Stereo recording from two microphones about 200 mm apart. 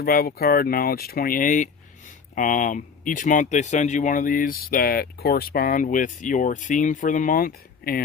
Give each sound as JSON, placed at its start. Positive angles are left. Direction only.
{"t": 0.0, "sound": "speech", "side_deg": 50}